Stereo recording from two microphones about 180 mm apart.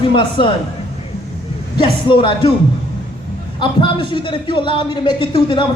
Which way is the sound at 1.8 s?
30° left (ahead or behind).